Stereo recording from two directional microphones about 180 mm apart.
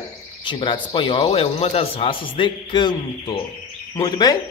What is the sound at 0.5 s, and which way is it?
A man's voice, 25° left (ahead or behind).